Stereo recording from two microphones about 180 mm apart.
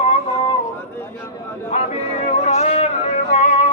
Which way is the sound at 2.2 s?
40° left (ahead or behind).